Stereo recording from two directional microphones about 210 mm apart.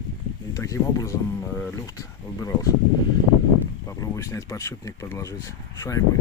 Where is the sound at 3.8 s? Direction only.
15° left (ahead or behind).